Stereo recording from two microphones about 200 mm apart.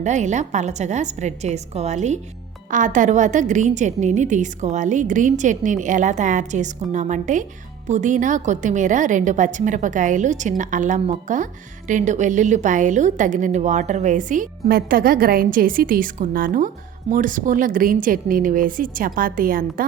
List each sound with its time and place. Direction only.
0.0 s a woman's voice: 35° right (ahead or behind)